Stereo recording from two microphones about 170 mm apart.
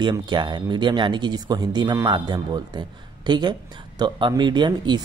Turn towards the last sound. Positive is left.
turn(degrees=-25)  # may be behind; listen again after turning